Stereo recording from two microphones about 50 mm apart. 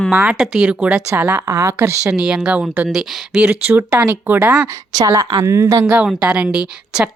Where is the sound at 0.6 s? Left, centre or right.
Right.